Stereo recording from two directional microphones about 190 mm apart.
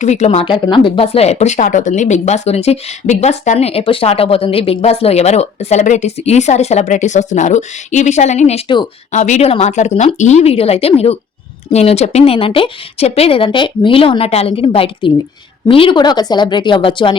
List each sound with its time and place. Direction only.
0.0 s speech: 35° left (ahead or behind)
9.1 s a woman's voice: 40° left (ahead or behind)